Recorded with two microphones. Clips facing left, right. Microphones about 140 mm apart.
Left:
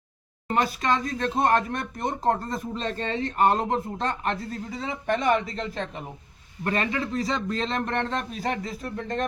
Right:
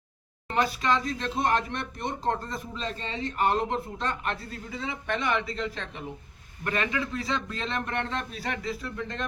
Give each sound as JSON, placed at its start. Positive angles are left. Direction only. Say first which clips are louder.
{"t": 0.5, "sound": "a man's voice", "louder": "left 2 dB", "side_deg": 45}